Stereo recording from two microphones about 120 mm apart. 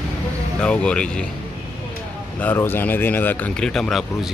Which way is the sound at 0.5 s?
10° left (ahead or behind).